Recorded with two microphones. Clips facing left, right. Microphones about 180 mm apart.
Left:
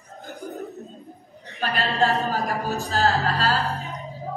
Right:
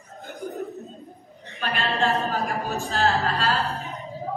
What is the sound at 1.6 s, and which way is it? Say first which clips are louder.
Speech: left 2 dB; 40° left (ahead or behind).